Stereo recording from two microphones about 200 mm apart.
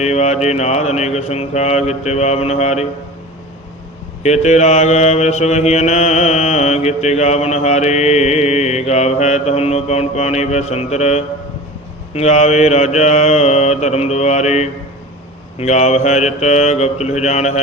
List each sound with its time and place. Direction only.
0.0 s mantra: 35° left (ahead or behind)
4.2 s mantra: 35° left (ahead or behind)